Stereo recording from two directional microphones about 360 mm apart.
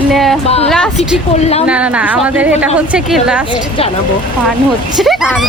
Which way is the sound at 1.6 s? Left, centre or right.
Centre.